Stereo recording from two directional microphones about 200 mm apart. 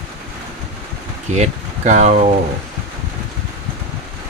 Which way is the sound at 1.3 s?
35° right (ahead or behind).